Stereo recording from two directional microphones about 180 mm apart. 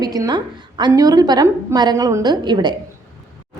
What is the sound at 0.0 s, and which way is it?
A woman's voice, 20° right (ahead or behind).